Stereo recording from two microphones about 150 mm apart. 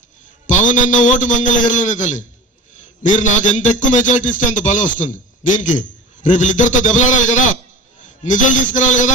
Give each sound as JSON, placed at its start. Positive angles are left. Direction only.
{"t": 0.4, "sound": "a man's voice", "side_deg": 55}